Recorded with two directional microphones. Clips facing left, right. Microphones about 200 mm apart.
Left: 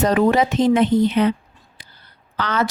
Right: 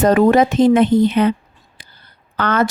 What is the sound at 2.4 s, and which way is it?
Speech, 55° right (ahead or behind).